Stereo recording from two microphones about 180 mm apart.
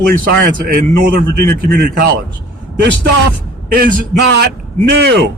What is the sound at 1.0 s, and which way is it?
A man's voice, 55° right (ahead or behind).